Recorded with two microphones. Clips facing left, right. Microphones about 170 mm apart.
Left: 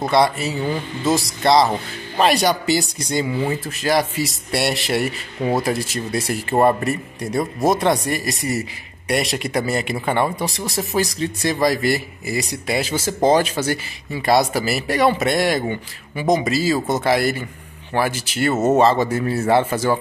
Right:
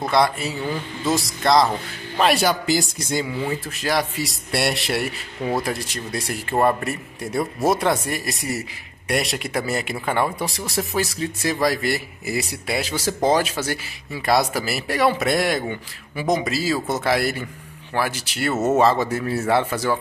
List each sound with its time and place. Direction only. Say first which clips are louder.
0.1 s speech: left 2 dB; centre (ahead or behind)
6.5 s a man's voice: left 3 dB; 20° left (ahead or behind)
6.8 s speech: left 4 dB; 5° right (ahead or behind)
18.5 s a man's voice: left 3 dB; 15° left (ahead or behind)
18.8 s speech: left 2 dB; centre (ahead or behind)